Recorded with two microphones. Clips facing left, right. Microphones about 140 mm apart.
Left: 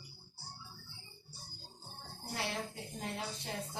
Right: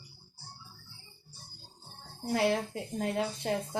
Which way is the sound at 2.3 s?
85° right.